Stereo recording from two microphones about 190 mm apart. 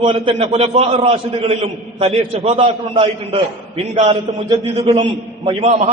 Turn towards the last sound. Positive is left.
turn(degrees=-35)  # may be behind; listen again after turning